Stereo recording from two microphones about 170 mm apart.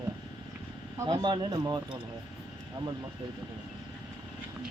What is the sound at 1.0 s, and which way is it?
Speech, 20° right (ahead or behind).